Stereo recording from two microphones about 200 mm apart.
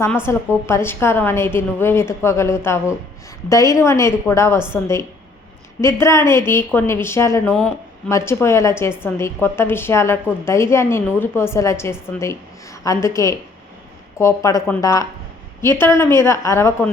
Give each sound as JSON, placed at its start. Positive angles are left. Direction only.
{"t": 0.3, "sound": "a woman's voice", "side_deg": 15}